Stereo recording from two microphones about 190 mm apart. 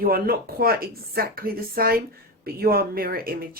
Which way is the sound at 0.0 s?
50° right (ahead or behind).